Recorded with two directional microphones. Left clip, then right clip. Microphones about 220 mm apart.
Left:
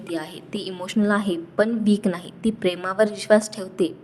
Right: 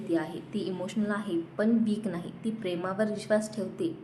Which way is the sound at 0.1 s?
40° left (ahead or behind).